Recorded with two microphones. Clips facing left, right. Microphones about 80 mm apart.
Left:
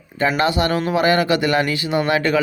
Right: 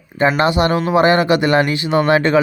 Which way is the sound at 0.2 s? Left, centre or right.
Right.